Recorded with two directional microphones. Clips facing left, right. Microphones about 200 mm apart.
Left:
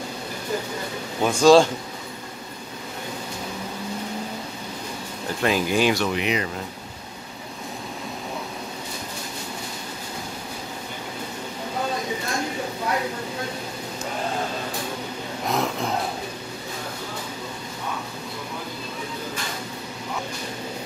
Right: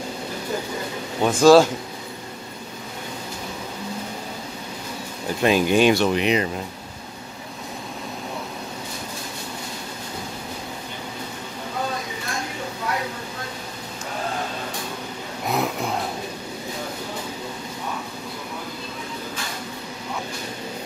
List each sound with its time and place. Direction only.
1.2 s speech: 5° right (ahead or behind)
5.4 s speech: 20° right (ahead or behind)
15.4 s a sound: 5° right (ahead or behind)